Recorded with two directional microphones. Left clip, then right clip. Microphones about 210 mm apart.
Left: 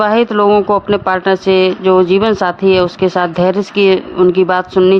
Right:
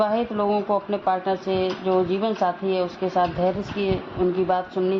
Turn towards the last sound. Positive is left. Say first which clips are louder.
# left 12 dB
turn(degrees=45)  # may be behind; listen again after turning